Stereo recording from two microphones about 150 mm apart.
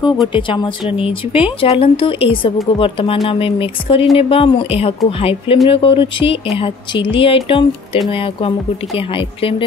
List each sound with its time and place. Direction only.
0.3 s speech: 35° left (ahead or behind)